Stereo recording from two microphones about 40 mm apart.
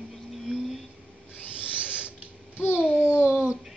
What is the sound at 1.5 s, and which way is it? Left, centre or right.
Owl, right.